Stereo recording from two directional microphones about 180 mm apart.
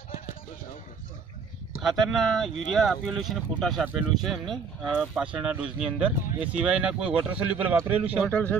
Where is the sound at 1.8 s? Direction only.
Centre (ahead or behind).